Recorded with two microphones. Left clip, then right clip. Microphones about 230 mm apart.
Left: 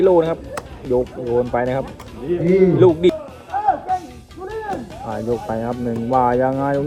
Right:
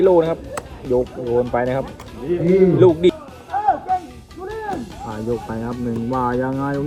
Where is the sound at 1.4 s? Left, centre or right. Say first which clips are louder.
Even; centre.